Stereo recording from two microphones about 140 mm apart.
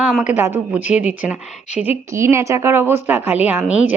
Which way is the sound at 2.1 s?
20° right (ahead or behind).